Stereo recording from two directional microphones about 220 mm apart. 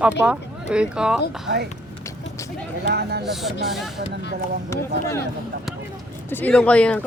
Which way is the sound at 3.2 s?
Centre (ahead or behind).